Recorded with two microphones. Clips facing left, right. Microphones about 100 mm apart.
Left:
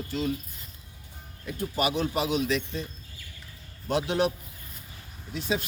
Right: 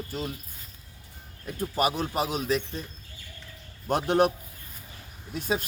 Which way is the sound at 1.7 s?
40° right (ahead or behind).